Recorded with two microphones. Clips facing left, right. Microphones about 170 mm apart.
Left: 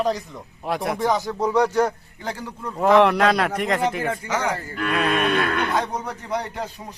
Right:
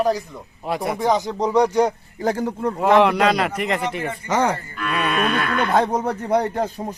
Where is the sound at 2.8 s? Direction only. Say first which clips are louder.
Even; centre (ahead or behind).